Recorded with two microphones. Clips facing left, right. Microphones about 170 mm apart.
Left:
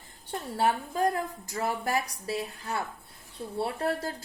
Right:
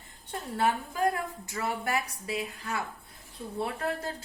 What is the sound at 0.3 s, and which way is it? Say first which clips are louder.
A woman's voice: left 1 dB; 35° left (ahead or behind).